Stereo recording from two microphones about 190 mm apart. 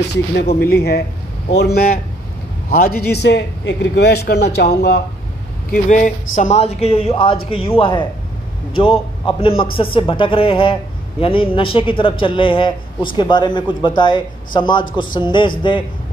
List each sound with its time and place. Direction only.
0.1 s a man's voice: 60° left (ahead or behind)
5.7 s a man's voice: 40° left (ahead or behind); by 15.5 s 25° left (ahead or behind)